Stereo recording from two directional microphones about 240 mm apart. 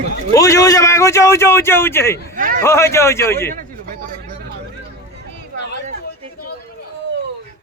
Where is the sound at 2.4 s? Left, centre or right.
Right.